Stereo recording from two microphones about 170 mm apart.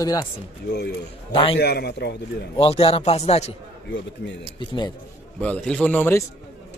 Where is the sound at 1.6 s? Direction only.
70° left (ahead or behind).